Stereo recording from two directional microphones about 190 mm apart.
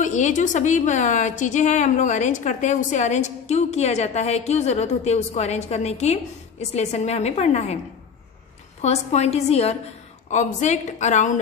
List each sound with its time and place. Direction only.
0.0 s a woman's voice: 40° left (ahead or behind)
8.8 s a woman's voice: 35° left (ahead or behind)